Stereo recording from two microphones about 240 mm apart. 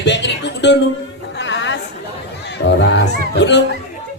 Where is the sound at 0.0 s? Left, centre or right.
Left.